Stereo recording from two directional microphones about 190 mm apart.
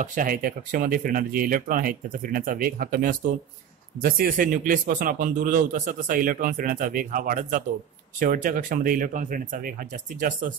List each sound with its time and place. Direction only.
0.0 s a man's voice: 45° right (ahead or behind)